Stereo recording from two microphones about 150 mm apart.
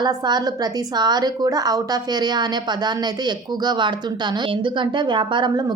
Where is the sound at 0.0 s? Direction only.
30° right (ahead or behind).